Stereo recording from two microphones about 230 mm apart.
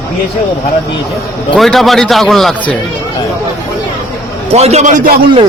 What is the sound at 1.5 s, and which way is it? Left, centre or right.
A man's voice, centre.